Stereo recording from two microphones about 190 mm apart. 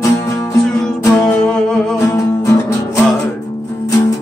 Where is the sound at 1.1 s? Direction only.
5° left (ahead or behind).